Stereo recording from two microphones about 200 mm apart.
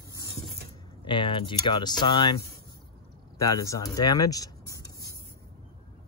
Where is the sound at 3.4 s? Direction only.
15° left (ahead or behind).